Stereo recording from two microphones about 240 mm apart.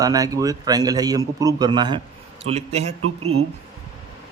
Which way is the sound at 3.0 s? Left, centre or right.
Right.